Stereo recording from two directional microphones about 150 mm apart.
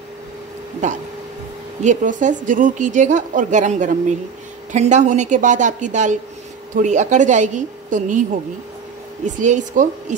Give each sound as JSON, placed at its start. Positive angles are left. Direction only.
{"t": 0.8, "sound": "a woman's voice", "side_deg": -55}